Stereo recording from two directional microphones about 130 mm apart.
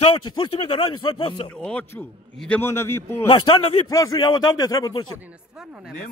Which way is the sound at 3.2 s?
40° left (ahead or behind).